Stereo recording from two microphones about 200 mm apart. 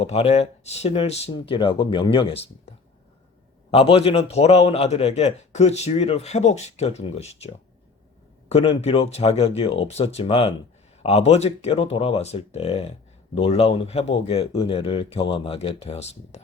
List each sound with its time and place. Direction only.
0.0 s speech: 30° left (ahead or behind)
3.7 s a man's voice: 30° left (ahead or behind)